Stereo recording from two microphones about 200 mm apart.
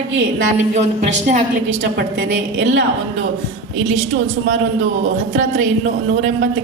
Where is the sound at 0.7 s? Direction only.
35° right (ahead or behind).